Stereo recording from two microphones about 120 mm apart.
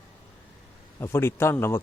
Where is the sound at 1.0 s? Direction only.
20° left (ahead or behind).